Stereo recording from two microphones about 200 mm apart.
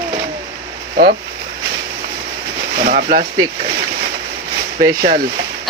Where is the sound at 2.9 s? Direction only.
45° right (ahead or behind).